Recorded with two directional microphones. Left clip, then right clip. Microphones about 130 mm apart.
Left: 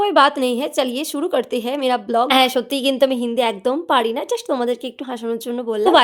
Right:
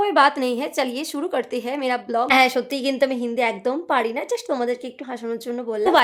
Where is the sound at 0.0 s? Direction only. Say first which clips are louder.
Left 3 dB; 35° left (ahead or behind).